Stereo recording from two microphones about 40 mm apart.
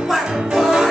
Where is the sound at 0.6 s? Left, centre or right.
Centre.